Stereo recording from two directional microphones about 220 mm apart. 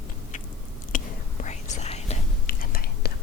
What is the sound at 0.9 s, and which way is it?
Whispering, 35° left (ahead or behind).